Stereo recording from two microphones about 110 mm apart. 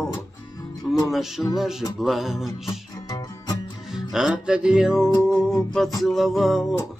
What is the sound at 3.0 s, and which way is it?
Music, 35° left (ahead or behind).